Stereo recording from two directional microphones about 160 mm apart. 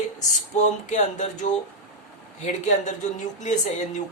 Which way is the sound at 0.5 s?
50° left (ahead or behind).